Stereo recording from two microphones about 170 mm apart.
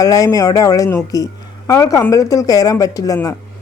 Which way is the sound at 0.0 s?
20° left (ahead or behind).